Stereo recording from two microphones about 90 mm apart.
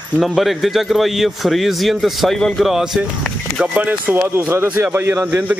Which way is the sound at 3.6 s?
15° right (ahead or behind).